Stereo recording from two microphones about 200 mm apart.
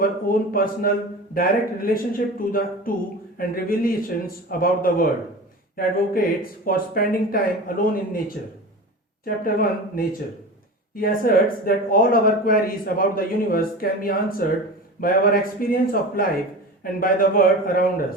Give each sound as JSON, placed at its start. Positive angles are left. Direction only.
{"t": 0.0, "sound": "speech", "side_deg": 45}
{"t": 9.2, "sound": "speech", "side_deg": 45}